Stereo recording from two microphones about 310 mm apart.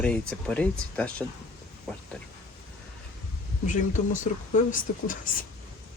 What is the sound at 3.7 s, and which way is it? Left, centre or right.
Speech, left.